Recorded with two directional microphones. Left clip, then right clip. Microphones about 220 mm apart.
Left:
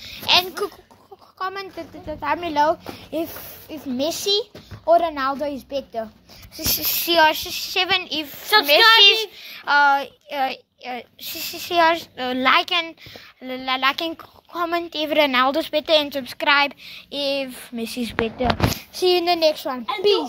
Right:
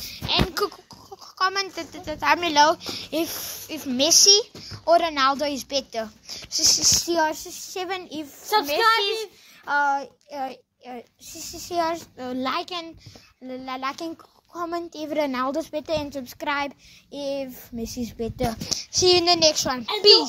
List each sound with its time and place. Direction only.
0.3 s a sound: 10° left (ahead or behind)
1.4 s a child's voice: centre (ahead or behind)
7.1 s speech: 15° right (ahead or behind)
8.5 s a woman's voice: 20° right (ahead or behind)
8.9 s a child's voice: centre (ahead or behind)